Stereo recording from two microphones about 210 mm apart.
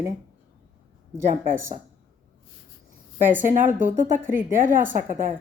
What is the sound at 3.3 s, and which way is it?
Speech, 40° right (ahead or behind).